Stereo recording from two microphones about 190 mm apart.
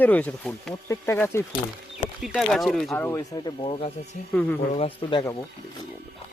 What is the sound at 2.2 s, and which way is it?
Speech, centre (ahead or behind).